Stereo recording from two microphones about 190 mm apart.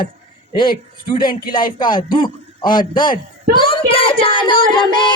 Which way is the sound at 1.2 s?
50° left (ahead or behind).